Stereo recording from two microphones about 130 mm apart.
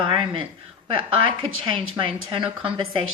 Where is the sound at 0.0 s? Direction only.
40° right (ahead or behind).